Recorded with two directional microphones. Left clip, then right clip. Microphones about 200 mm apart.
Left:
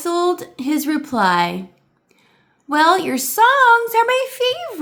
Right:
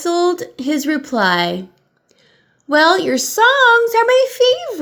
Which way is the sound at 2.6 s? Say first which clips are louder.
Right 2 dB; 15° right (ahead or behind).